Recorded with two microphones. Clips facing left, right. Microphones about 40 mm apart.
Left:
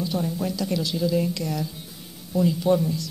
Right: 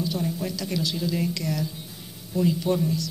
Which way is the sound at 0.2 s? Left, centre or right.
Centre.